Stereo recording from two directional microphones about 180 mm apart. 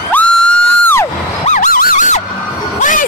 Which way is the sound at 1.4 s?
45° left (ahead or behind).